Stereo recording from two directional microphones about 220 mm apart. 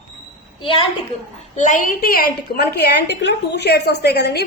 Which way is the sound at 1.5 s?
35° left (ahead or behind).